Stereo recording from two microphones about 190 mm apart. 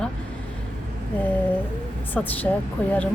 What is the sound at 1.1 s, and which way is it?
Speech, 10° left (ahead or behind).